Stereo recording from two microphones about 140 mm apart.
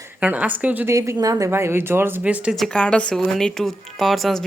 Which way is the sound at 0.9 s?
25° right (ahead or behind).